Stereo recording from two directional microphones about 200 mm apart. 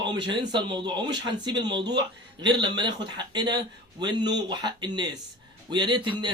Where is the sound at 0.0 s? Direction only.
20° right (ahead or behind).